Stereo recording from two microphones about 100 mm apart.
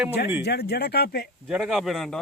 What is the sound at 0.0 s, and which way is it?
Speech, 20° right (ahead or behind).